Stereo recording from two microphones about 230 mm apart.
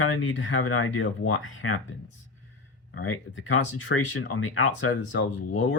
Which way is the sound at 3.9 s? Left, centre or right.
Left.